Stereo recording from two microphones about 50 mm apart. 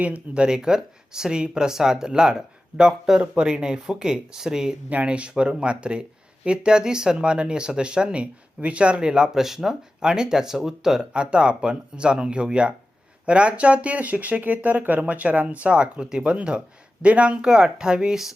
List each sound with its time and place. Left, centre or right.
0.0 s speech: right
0.4 s speech: centre
4.9 s speech: right; by 18.3 s centre